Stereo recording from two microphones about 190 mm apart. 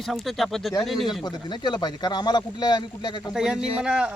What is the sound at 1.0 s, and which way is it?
Speech, 25° left (ahead or behind).